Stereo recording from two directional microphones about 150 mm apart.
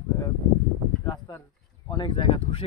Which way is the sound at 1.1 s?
20° left (ahead or behind).